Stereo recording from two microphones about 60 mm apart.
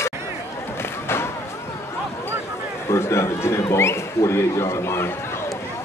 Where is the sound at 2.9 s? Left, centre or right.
Left.